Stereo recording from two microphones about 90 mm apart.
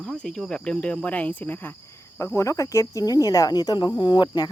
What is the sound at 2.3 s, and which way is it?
Speech, 35° left (ahead or behind).